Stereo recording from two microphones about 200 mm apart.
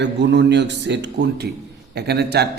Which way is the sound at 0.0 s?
60° right (ahead or behind).